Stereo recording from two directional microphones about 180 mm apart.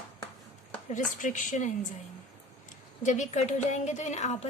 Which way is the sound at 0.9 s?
45° left (ahead or behind).